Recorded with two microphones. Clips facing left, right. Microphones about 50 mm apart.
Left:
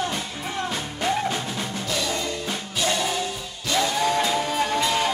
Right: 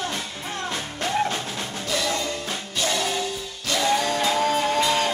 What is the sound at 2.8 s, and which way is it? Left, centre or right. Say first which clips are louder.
Music: left 1 dB; centre.